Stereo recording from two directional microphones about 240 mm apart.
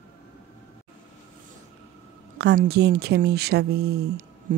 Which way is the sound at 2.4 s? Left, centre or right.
Right.